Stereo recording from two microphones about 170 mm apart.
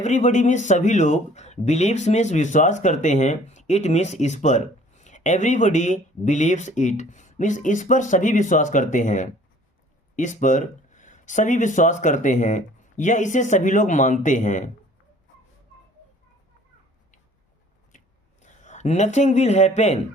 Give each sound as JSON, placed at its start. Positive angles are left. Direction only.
{"t": 0.0, "sound": "speech", "side_deg": 45}
{"t": 17.9, "sound": "a sound", "side_deg": 50}
{"t": 18.4, "sound": "a man's voice", "side_deg": 45}